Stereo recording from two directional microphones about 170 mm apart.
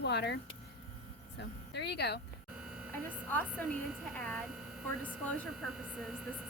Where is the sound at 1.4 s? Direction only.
80° left.